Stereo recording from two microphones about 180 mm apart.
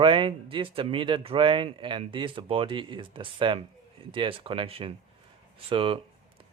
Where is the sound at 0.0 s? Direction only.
30° right (ahead or behind).